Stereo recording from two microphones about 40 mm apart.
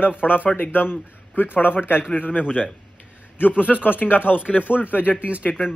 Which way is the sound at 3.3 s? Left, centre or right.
Left.